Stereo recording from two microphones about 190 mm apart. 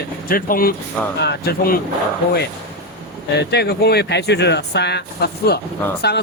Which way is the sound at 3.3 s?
60° left (ahead or behind).